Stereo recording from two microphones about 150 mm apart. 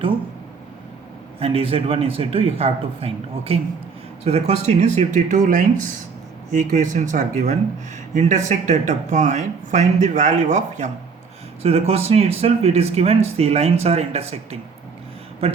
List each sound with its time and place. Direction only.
1.4 s a man's voice: 40° right (ahead or behind)